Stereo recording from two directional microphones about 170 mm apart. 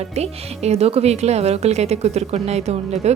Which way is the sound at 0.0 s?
40° right (ahead or behind).